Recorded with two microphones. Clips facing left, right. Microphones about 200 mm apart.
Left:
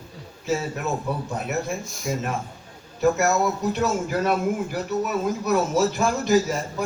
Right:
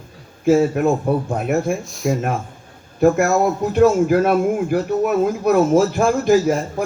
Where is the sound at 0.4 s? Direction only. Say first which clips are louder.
Right 11 dB; 50° right (ahead or behind).